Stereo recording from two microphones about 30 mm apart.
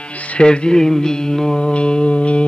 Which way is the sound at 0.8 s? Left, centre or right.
Centre.